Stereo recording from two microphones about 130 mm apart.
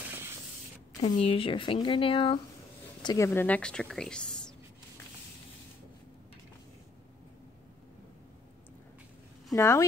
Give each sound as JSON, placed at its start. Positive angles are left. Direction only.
{"t": 0.0, "sound": "spray", "side_deg": -20}
{"t": 1.0, "sound": "speech", "side_deg": 45}
{"t": 3.0, "sound": "speech", "side_deg": 30}
{"t": 9.5, "sound": "speech", "side_deg": 20}